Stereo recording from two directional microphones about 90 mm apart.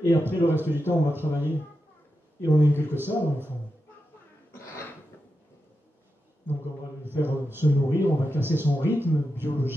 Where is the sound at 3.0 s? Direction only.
25° right (ahead or behind).